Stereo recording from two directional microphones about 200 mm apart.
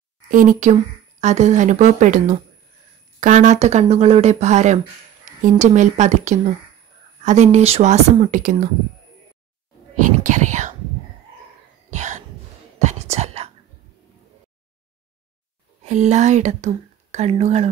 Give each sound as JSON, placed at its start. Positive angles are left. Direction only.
{"t": 0.3, "sound": "speech", "side_deg": -40}
{"t": 9.9, "sound": "speech", "side_deg": -40}
{"t": 11.9, "sound": "a sound", "side_deg": -35}
{"t": 12.7, "sound": "whispering", "side_deg": -35}
{"t": 15.8, "sound": "speech", "side_deg": -35}